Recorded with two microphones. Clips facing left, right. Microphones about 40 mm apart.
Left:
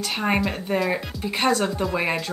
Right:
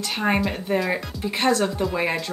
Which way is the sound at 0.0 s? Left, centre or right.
Centre.